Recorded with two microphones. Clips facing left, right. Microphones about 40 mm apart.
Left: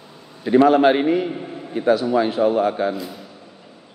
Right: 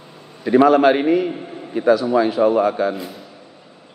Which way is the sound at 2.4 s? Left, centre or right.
Centre.